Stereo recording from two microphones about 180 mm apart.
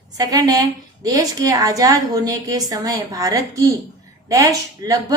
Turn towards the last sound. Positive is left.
turn(degrees=-20)  # may be behind; listen again after turning